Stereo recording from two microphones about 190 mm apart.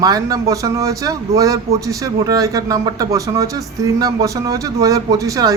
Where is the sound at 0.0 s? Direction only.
20° right (ahead or behind).